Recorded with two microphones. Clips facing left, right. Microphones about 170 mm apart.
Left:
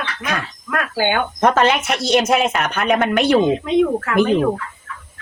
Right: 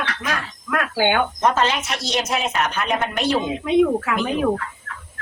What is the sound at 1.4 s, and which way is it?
Speech, 65° left (ahead or behind).